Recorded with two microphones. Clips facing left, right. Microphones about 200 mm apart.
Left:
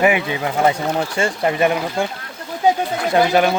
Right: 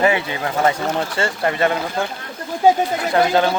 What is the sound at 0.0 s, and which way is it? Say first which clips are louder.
Speech: left 1 dB; 15° left (ahead or behind).